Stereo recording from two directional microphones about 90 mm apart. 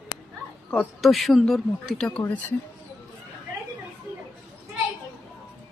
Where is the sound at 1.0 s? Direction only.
Centre (ahead or behind).